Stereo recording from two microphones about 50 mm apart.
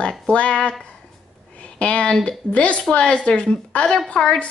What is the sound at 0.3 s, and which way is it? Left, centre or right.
A woman's voice, left.